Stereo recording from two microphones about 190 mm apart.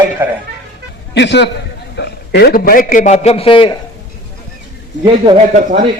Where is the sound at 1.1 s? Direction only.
65° left (ahead or behind); by 3.7 s 25° left (ahead or behind).